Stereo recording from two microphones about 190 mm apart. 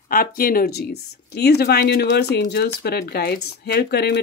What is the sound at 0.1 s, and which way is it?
Speech, 50° left (ahead or behind).